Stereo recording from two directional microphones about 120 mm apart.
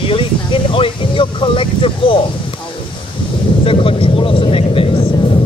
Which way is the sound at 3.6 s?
50° left (ahead or behind).